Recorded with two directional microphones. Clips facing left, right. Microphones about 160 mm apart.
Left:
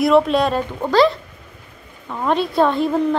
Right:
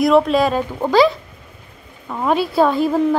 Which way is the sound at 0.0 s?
Centre (ahead or behind).